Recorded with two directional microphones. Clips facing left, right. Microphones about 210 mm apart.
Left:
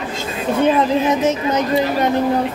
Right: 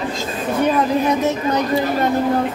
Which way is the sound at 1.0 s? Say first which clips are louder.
Left 1 dB; 20° left (ahead or behind).